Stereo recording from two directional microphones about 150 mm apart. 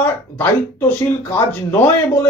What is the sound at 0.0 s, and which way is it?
A man's voice, 15° left (ahead or behind).